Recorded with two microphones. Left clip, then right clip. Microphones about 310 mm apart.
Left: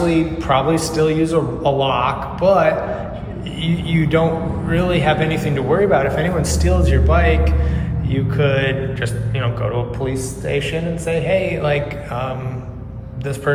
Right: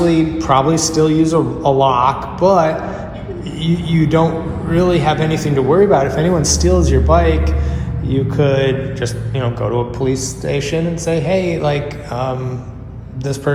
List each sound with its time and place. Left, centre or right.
0.1 s a man's voice: centre
8.1 s music: centre